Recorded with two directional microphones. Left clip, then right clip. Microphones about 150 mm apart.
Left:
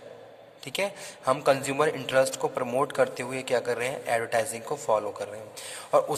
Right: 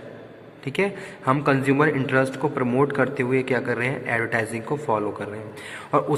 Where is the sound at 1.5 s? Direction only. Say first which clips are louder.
Right 4 dB; 55° left (ahead or behind).